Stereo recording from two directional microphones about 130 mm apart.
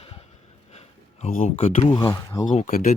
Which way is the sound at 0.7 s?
55° left (ahead or behind).